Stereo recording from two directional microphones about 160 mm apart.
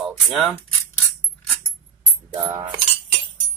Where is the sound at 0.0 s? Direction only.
Centre (ahead or behind).